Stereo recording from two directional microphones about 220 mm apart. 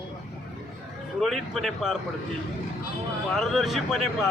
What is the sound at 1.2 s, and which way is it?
Speech, centre (ahead or behind).